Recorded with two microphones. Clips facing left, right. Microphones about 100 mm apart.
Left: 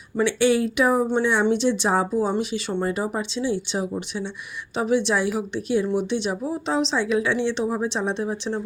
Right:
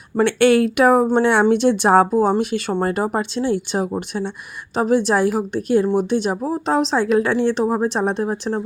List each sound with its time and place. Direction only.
0.3 s a woman's voice: 60° right (ahead or behind); by 8.6 s 45° right (ahead or behind)